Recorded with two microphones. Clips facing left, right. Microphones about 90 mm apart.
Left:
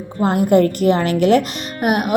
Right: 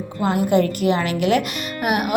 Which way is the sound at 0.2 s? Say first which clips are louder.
Left 4 dB; 40° left (ahead or behind).